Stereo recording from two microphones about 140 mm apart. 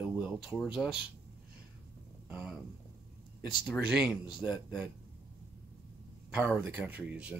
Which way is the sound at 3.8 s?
5° right (ahead or behind).